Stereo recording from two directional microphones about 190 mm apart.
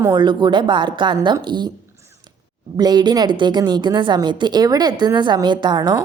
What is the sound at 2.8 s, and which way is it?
A woman's voice, 20° right (ahead or behind).